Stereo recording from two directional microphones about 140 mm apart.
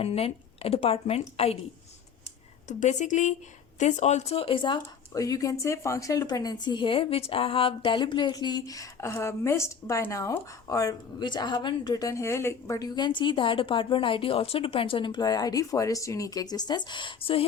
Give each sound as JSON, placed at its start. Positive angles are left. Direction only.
{"t": 0.0, "sound": "a woman's voice", "side_deg": 45}
{"t": 2.6, "sound": "a woman's voice", "side_deg": 60}
{"t": 5.1, "sound": "speech", "side_deg": 25}